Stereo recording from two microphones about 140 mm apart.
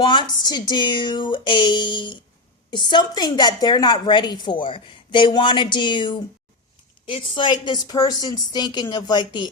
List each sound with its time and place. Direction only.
0.0 s a woman's voice: 35° left (ahead or behind)